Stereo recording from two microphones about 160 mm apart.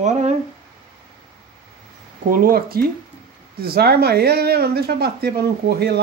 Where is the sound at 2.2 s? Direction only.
65° right (ahead or behind).